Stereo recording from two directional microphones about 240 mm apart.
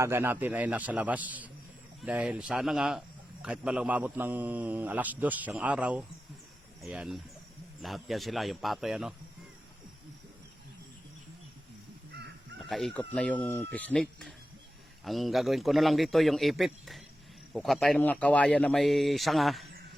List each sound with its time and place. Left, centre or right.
0.0 s a man's voice: centre
12.1 s crow: right
12.5 s speech: centre